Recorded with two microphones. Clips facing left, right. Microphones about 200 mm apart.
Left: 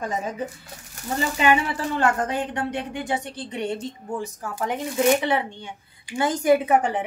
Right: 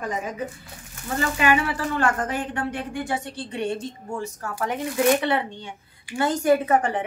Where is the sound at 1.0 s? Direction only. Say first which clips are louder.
Left 1 dB; 20° left (ahead or behind).